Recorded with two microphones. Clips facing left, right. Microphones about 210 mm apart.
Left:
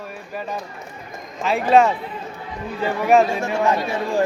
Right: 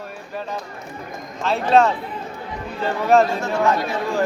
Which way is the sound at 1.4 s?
Centre (ahead or behind).